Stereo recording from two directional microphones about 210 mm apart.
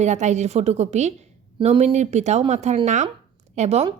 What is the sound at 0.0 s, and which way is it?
A woman's voice, 35° right (ahead or behind).